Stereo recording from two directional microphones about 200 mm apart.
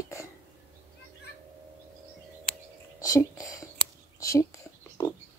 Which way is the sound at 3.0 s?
15° left (ahead or behind).